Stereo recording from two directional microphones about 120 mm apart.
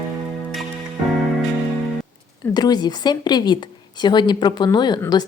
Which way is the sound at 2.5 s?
35° left (ahead or behind).